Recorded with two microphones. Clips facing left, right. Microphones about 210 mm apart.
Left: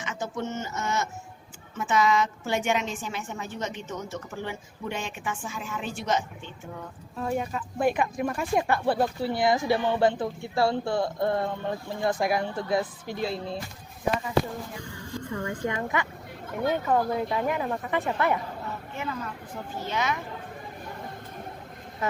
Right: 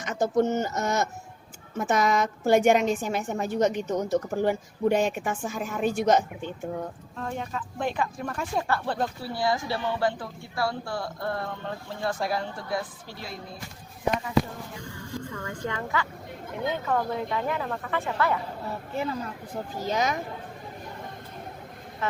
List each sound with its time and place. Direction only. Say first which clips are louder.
0.0 s a woman's voice: right 8 dB; 40° right (ahead or behind)
7.2 s a woman's voice: left 4 dB; 10° left (ahead or behind); by 13.6 s 30° left (ahead or behind)
15.4 s a woman's voice: left 3 dB; 20° left (ahead or behind)
18.9 s speech: right 5 dB; 35° right (ahead or behind)